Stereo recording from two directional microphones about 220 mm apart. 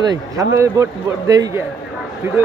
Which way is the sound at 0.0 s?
15° right (ahead or behind).